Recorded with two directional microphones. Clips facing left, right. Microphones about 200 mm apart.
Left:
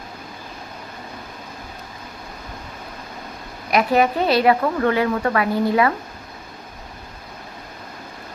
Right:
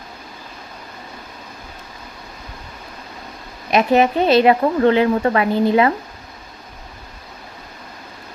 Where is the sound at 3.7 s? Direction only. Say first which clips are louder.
Right 3 dB; 25° right (ahead or behind).